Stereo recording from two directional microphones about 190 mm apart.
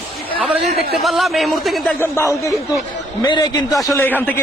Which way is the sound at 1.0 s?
Centre (ahead or behind).